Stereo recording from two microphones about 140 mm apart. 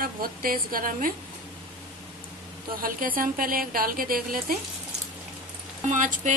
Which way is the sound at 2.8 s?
85° right.